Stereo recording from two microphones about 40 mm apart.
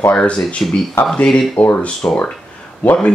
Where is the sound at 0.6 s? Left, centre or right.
Left.